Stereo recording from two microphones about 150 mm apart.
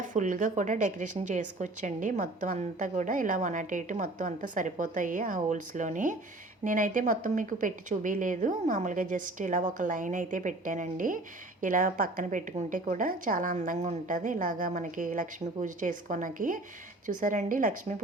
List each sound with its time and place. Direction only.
0.0 s a woman's voice: 60° right (ahead or behind)